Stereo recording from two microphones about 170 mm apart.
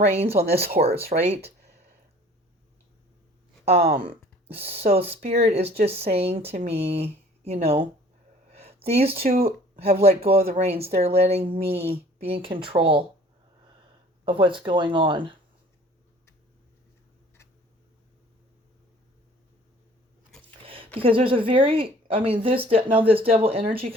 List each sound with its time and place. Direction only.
0.1 s speech: 40° right (ahead or behind)
3.7 s speech: 35° right (ahead or behind)
14.3 s speech: 30° right (ahead or behind)
20.7 s a sound: 35° right (ahead or behind)
21.0 s speech: 30° right (ahead or behind)